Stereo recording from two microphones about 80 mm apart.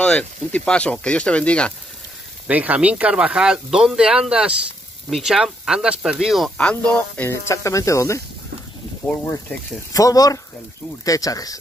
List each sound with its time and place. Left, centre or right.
0.0 s speech: centre
2.4 s speech: centre
6.6 s speech: centre
7.2 s speech: left
9.9 s speech: left